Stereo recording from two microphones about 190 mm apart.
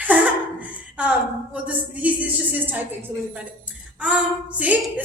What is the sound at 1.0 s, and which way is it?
A woman's voice, 5° right (ahead or behind).